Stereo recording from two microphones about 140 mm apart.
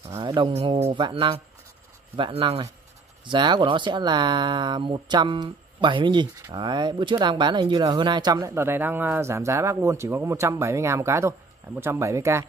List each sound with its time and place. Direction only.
0.2 s speech: 30° right (ahead or behind)
0.5 s speech: 50° right (ahead or behind); by 12.4 s 20° right (ahead or behind)